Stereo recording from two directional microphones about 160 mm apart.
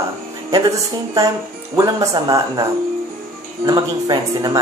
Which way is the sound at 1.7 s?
20° right (ahead or behind).